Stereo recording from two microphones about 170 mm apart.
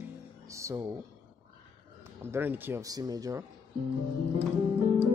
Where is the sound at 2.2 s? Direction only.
15° right (ahead or behind).